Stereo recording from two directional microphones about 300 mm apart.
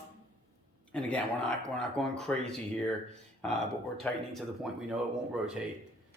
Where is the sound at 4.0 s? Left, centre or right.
Centre.